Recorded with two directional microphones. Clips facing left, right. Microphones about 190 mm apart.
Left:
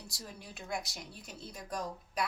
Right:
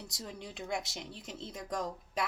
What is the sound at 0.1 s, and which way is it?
Speech, 20° right (ahead or behind).